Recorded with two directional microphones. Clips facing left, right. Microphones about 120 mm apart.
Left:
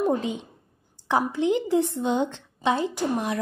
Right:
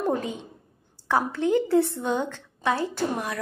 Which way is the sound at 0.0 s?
20° left (ahead or behind).